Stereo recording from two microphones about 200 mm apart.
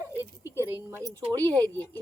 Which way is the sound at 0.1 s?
15° left (ahead or behind).